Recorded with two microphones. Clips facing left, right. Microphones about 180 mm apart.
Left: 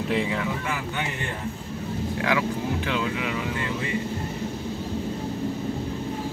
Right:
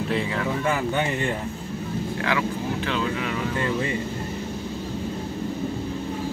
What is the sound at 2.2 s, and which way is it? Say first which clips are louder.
Speech: left 1 dB; 15° left (ahead or behind).